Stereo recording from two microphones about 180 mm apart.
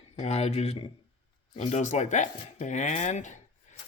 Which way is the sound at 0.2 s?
35° left (ahead or behind).